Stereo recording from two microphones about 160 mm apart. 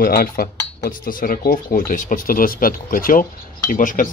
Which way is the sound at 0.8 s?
60° left (ahead or behind).